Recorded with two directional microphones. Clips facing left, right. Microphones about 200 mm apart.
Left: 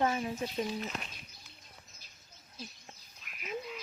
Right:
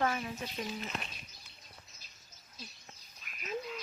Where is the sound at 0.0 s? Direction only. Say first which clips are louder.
Left 2 dB; 25° left (ahead or behind).